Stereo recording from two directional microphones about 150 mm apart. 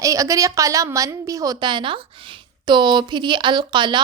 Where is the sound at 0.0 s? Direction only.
20° right (ahead or behind).